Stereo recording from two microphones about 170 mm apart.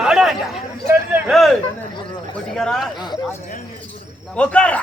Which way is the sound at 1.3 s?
Centre (ahead or behind).